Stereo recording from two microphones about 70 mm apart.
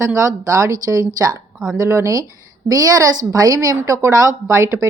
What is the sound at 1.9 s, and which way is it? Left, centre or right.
Speech, right.